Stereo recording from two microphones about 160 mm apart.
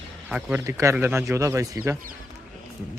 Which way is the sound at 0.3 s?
10° right (ahead or behind).